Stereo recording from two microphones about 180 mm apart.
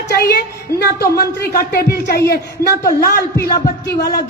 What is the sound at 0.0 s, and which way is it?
A woman's voice, 65° left (ahead or behind).